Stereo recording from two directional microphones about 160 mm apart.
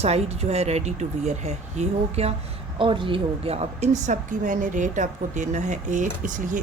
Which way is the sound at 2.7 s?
30° right (ahead or behind).